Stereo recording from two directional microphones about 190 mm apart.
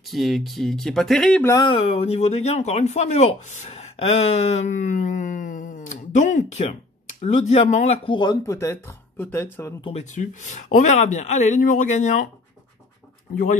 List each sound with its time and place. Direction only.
0.0 s speech: centre (ahead or behind)
1.6 s speech: 30° left (ahead or behind); by 9.8 s 15° left (ahead or behind)
9.8 s speech: 30° left (ahead or behind)